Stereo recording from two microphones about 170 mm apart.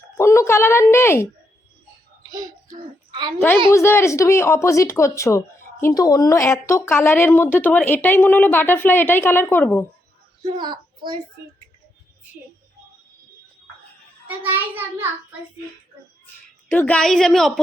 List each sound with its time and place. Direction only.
0.2 s speech: 15° left (ahead or behind)
2.3 s a sound: 25° right (ahead or behind)
3.3 s speech: 10° left (ahead or behind)
10.4 s a child's voice: 30° right (ahead or behind)
14.3 s a child's voice: 10° right (ahead or behind)
16.2 s a woman's voice: 10° left (ahead or behind)